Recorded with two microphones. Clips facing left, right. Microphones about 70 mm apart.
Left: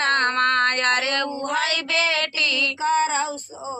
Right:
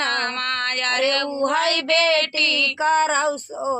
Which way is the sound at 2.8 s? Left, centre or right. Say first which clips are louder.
Right 3 dB; right.